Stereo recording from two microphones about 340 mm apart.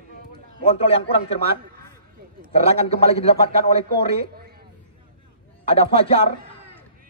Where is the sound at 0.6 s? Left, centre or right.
Centre.